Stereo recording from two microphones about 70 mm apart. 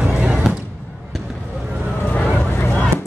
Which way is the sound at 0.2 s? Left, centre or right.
Centre.